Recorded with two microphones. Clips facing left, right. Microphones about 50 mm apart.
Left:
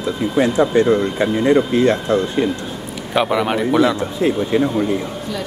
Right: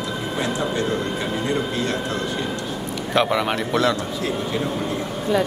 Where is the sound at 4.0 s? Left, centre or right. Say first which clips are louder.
Left 7 dB; left.